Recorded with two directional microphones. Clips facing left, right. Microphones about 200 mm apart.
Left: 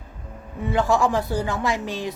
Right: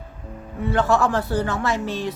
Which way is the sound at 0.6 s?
15° left (ahead or behind).